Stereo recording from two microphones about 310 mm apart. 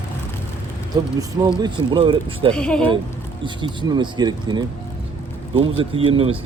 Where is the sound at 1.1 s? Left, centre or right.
Centre.